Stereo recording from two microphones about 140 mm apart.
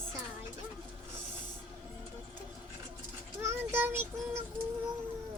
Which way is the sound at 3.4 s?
20° right (ahead or behind).